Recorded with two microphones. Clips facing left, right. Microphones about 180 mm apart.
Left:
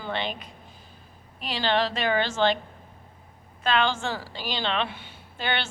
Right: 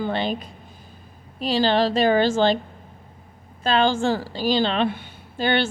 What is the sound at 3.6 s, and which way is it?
A woman's voice, 35° right (ahead or behind).